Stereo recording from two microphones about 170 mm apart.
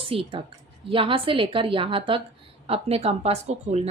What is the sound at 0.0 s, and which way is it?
A woman's voice, 30° right (ahead or behind).